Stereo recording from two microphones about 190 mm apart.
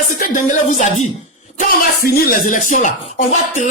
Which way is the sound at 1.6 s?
50° left (ahead or behind).